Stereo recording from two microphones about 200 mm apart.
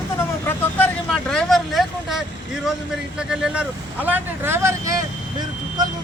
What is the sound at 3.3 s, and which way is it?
Speech, 5° right (ahead or behind).